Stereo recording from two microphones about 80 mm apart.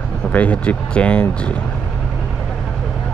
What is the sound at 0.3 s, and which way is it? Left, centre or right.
Speech, centre.